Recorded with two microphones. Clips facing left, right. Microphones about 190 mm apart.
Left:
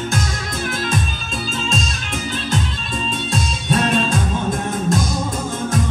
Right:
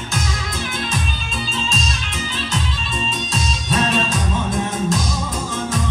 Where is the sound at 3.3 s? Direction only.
55° left (ahead or behind).